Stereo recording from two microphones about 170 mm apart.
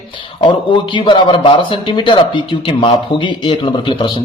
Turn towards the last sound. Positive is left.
turn(degrees=30)  # may be behind; listen again after turning